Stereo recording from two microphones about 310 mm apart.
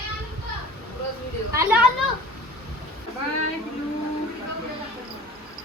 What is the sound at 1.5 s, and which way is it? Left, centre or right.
Speech, centre.